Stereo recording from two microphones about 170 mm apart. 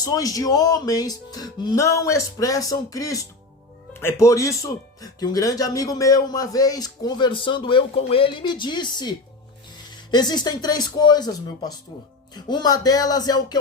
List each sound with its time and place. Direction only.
0.0 s speech: 20° left (ahead or behind)